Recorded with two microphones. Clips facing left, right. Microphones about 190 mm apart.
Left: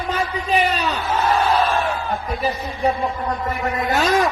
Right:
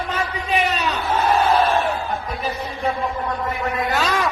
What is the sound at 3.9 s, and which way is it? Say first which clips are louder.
Speech: left 6 dB; 45° left (ahead or behind).